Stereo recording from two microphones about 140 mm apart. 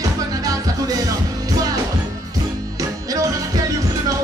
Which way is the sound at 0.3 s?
25° right (ahead or behind).